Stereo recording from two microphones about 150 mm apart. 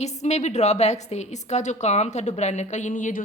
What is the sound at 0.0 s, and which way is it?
A woman's voice, 50° left (ahead or behind).